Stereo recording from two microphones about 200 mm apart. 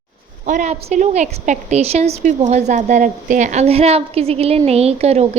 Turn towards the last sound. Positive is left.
turn(degrees=-30)  # may be behind; listen again after turning